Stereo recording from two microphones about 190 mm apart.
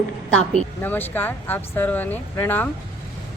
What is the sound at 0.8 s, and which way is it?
Speech, 10° left (ahead or behind).